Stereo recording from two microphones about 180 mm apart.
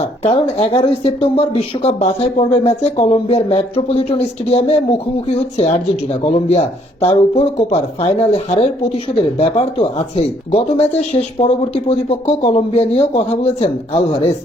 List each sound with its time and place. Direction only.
0.0 s speech: 35° left (ahead or behind)